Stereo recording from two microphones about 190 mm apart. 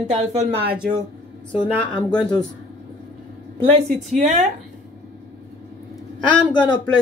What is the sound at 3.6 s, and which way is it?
Speech, 35° right (ahead or behind).